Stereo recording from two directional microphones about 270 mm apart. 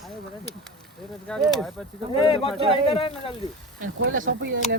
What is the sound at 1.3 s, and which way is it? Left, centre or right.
Speech, centre.